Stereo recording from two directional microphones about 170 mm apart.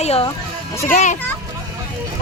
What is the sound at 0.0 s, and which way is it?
Speech, 35° left (ahead or behind).